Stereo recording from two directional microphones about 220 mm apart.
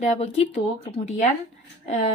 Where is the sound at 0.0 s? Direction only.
30° left (ahead or behind).